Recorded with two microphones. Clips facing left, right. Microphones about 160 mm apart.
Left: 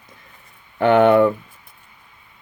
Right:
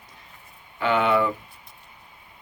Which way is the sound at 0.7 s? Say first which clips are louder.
Left 9 dB; 55° left (ahead or behind).